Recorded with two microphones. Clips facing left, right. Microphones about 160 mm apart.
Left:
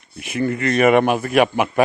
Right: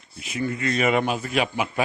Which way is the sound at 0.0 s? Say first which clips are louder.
Left 6 dB; 60° left (ahead or behind).